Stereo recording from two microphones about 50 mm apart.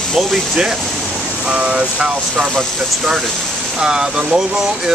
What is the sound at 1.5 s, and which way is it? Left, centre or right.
Speech, right.